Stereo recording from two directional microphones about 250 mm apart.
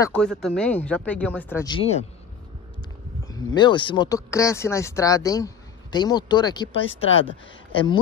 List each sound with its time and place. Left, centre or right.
0.0 s speech: centre
1.8 s speech: left
3.5 s speech: centre